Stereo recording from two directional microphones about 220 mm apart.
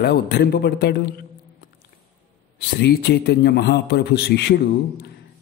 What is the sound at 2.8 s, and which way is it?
Speech, 45° left (ahead or behind).